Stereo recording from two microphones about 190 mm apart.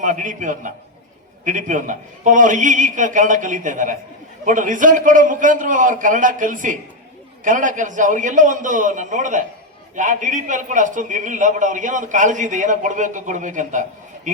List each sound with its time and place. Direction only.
0.0 s a man's voice: 40° right (ahead or behind)